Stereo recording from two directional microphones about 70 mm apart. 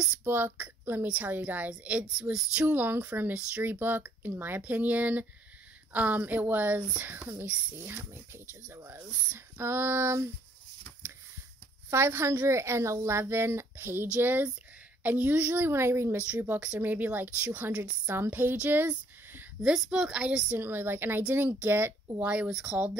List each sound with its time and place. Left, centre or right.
0.2 s a woman's voice: right
9.6 s speech: right
11.9 s a woman's voice: right
19.6 s a woman's voice: centre
20.5 s a woman's voice: right
22.5 s a woman's voice: centre